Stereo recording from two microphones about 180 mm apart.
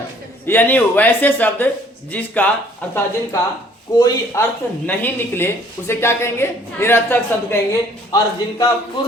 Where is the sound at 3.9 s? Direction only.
20° left (ahead or behind).